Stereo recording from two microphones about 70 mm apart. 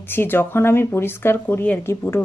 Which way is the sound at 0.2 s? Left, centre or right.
Left.